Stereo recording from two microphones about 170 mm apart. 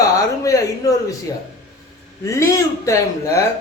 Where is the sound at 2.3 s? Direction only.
20° left (ahead or behind).